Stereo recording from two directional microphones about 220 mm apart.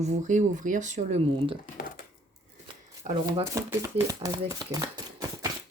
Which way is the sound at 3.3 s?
15° right (ahead or behind).